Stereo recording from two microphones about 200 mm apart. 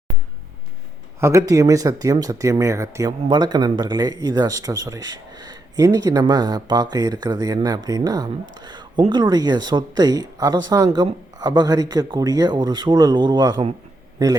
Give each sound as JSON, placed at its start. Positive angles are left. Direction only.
{"t": 1.2, "sound": "a man's voice", "side_deg": -15}